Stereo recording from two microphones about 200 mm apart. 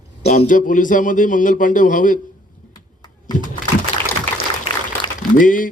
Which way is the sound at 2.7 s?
20° left (ahead or behind).